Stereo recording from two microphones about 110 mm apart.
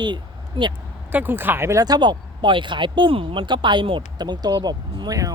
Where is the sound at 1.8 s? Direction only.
40° right (ahead or behind).